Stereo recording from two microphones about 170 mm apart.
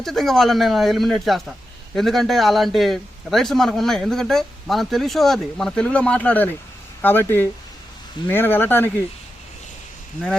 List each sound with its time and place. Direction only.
0.0 s a man's voice: centre (ahead or behind)